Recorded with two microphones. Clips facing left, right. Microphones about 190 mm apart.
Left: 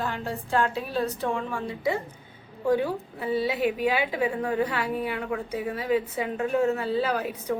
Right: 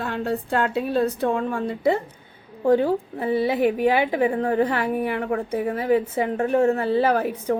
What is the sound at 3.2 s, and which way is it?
Speech, 50° right (ahead or behind).